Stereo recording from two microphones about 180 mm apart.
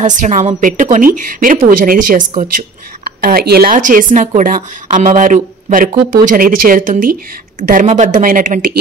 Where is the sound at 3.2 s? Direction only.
55° right (ahead or behind).